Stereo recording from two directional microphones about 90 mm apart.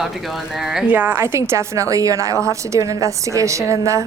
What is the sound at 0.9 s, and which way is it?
A woman's voice, 20° right (ahead or behind).